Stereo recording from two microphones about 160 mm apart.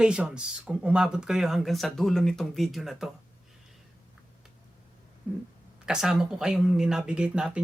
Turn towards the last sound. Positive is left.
turn(degrees=-5)  # may be behind; listen again after turning